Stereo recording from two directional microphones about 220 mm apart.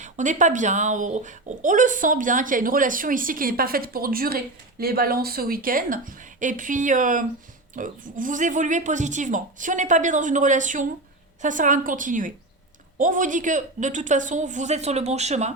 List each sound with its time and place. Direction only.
0.0 s speech: 35° right (ahead or behind)